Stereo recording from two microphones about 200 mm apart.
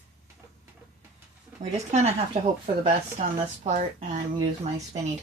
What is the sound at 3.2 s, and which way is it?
Speech, 40° right (ahead or behind).